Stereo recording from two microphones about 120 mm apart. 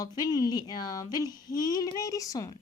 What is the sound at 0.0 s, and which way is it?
A woman's voice, 30° left (ahead or behind).